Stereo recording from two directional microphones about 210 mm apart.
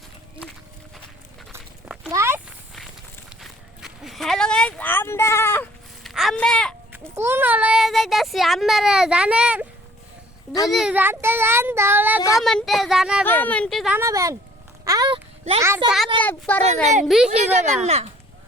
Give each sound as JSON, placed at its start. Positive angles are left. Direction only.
{"t": 1.5, "sound": "a sound", "side_deg": -15}
{"t": 3.2, "sound": "walk", "side_deg": 0}
{"t": 6.0, "sound": "a sound", "side_deg": 0}
{"t": 6.9, "sound": "child singing", "side_deg": -10}
{"t": 10.7, "sound": "speech", "side_deg": -5}
{"t": 12.4, "sound": "speech", "side_deg": 0}
{"t": 13.2, "sound": "speech", "side_deg": 10}
{"t": 13.9, "sound": "speech", "side_deg": -15}
{"t": 14.8, "sound": "a sound", "side_deg": -20}
{"t": 15.6, "sound": "speech", "side_deg": -10}
{"t": 16.6, "sound": "a woman's voice", "side_deg": -35}
{"t": 17.1, "sound": "speech", "side_deg": 0}
{"t": 17.5, "sound": "a woman's voice", "side_deg": -35}